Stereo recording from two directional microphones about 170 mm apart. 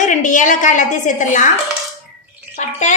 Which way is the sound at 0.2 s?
50° left (ahead or behind).